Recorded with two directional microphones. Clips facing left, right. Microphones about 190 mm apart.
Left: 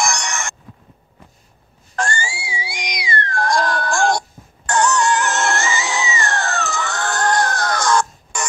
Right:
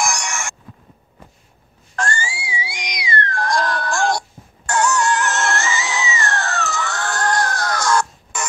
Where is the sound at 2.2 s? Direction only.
30° left (ahead or behind).